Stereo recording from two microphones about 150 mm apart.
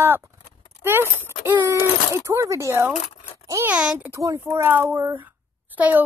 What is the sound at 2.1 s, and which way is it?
A child's voice, 20° right (ahead or behind).